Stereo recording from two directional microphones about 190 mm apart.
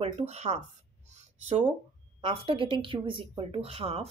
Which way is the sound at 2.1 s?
30° right (ahead or behind).